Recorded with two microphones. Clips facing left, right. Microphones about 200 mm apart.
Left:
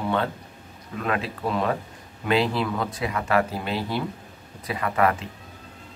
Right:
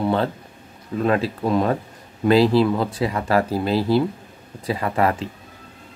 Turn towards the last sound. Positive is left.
turn(degrees=-30)  # may be behind; listen again after turning